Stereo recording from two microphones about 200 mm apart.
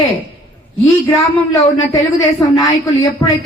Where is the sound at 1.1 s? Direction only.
15° left (ahead or behind).